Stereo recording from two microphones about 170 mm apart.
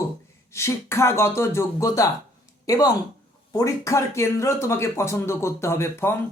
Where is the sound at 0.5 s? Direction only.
15° left (ahead or behind).